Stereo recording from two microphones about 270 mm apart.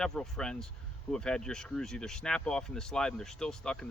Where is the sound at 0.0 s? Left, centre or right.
Centre.